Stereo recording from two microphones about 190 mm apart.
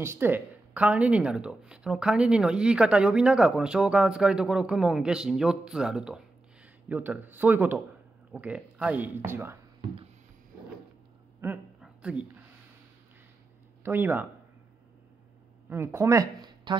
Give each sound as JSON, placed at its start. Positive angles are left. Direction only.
{"t": 0.0, "sound": "speech", "side_deg": -10}
{"t": 11.4, "sound": "a sound", "side_deg": -5}
{"t": 13.8, "sound": "speech", "side_deg": -10}
{"t": 15.7, "sound": "speech", "side_deg": -15}